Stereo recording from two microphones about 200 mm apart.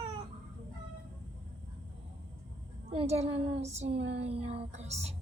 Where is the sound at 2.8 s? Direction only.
30° right (ahead or behind).